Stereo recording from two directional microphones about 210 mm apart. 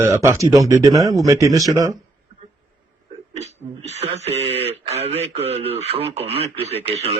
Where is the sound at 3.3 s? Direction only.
30° right (ahead or behind).